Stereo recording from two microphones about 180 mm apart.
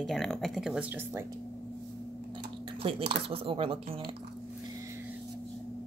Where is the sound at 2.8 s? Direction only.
30° right (ahead or behind).